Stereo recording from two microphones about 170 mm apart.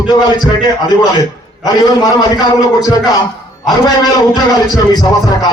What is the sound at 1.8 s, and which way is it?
Speech, 20° left (ahead or behind).